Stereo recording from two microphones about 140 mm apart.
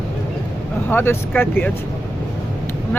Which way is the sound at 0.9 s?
15° left (ahead or behind).